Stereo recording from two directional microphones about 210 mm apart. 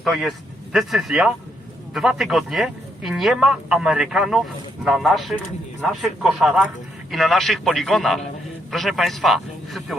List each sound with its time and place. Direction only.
0.0 s speech: centre (ahead or behind)